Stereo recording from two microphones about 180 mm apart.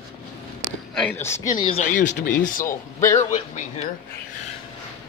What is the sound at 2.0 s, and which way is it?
Speech, 75° left (ahead or behind).